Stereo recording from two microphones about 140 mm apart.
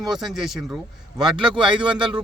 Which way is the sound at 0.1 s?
Centre (ahead or behind).